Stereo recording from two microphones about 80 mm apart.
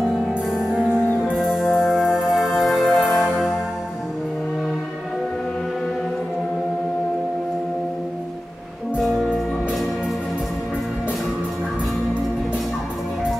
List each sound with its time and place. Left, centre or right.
1.3 s music: centre